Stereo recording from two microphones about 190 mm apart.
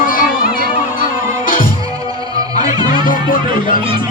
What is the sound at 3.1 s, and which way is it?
Music, 45° left (ahead or behind).